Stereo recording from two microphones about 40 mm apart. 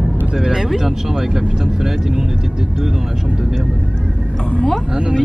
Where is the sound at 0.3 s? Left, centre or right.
Centre.